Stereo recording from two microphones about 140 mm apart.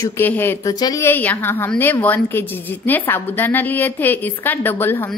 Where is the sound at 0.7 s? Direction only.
30° left (ahead or behind).